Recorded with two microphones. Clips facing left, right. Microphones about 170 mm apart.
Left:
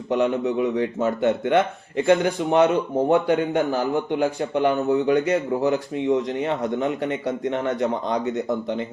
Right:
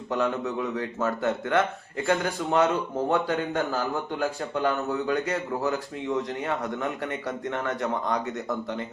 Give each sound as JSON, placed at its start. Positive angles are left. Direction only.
{"t": 0.1, "sound": "a man's voice", "side_deg": 20}